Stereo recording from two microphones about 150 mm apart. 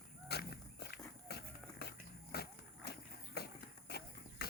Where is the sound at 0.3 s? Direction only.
90° left.